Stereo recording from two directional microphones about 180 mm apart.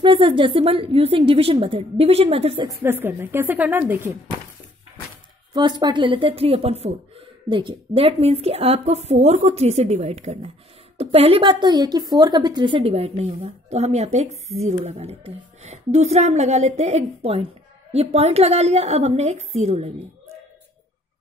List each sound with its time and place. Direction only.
0.0 s speech: 30° right (ahead or behind)
2.7 s a woman's voice: 15° right (ahead or behind)
5.5 s speech: 25° right (ahead or behind)